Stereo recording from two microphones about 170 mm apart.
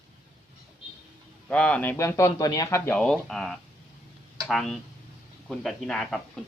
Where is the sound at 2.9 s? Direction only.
5° left (ahead or behind).